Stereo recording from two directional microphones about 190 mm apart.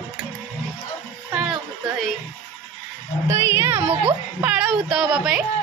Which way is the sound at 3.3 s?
15° right (ahead or behind).